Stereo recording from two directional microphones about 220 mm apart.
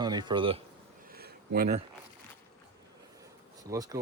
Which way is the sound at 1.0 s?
45° right (ahead or behind).